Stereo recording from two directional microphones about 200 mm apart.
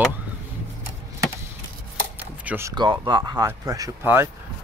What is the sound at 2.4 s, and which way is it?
Speech, 10° right (ahead or behind).